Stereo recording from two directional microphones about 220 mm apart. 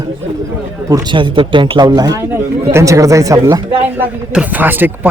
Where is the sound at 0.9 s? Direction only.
15° right (ahead or behind).